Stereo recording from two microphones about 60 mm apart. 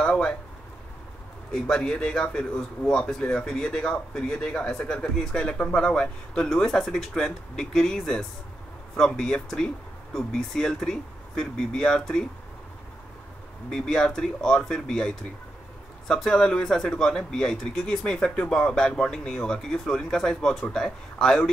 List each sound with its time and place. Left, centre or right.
0.0 s speech: centre
1.5 s speech: centre
13.7 s speech: centre